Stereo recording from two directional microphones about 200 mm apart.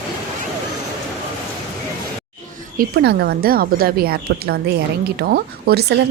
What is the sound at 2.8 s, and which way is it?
A woman's voice, 50° right (ahead or behind).